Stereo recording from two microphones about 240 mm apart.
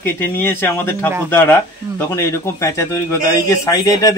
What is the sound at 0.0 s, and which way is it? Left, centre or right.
A man's voice, centre.